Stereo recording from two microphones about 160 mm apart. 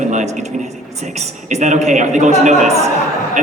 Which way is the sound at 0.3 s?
45° right (ahead or behind).